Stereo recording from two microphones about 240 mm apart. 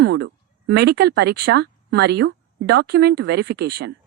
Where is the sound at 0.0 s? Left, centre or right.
Right.